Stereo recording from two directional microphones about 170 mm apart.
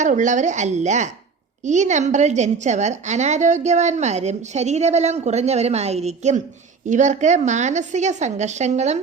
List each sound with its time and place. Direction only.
0.0 s a woman's voice: 45° right (ahead or behind)